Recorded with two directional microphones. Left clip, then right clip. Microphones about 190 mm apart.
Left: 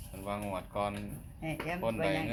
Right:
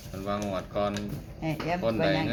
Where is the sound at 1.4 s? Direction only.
35° left (ahead or behind).